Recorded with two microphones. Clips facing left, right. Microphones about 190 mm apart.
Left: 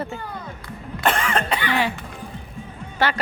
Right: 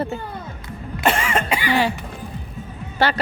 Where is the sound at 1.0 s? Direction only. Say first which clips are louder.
Right 1 dB; 10° right (ahead or behind).